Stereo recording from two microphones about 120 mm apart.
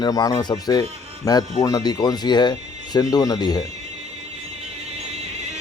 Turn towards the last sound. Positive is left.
turn(degrees=35)  # may be behind; listen again after turning